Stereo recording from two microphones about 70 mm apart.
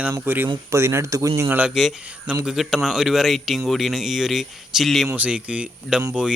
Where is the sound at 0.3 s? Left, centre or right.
Right.